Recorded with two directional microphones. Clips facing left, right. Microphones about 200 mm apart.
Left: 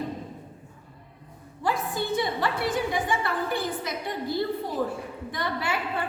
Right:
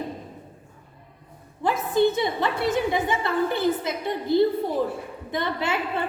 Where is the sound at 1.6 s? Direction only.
20° right (ahead or behind).